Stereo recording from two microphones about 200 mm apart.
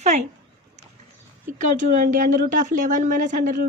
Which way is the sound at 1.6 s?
40° right (ahead or behind).